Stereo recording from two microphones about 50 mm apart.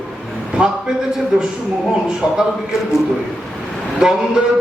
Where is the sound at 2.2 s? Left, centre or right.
Centre.